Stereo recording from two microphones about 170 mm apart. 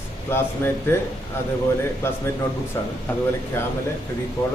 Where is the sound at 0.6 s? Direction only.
15° left (ahead or behind).